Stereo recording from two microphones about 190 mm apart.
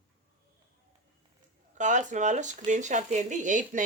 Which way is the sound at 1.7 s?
40° right (ahead or behind).